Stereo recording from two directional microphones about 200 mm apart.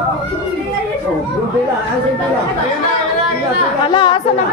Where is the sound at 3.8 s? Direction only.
25° left (ahead or behind).